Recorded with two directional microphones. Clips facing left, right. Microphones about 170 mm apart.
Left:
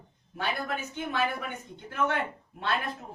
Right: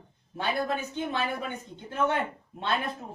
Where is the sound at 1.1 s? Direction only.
25° right (ahead or behind).